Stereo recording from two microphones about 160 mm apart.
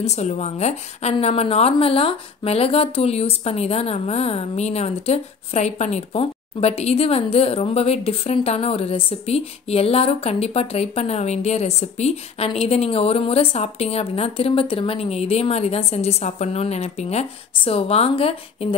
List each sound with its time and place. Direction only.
0.0 s a woman's voice: 45° left (ahead or behind)